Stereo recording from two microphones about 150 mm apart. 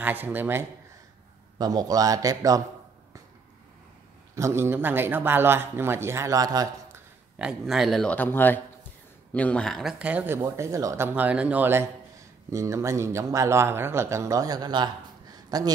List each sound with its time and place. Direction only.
0.0 s speech: 10° right (ahead or behind)
1.6 s speech: 25° right (ahead or behind)
4.4 s speech: 15° right (ahead or behind)
7.3 s speech: 5° right (ahead or behind)
9.9 s speech: 10° right (ahead or behind); by 15.7 s 25° right (ahead or behind)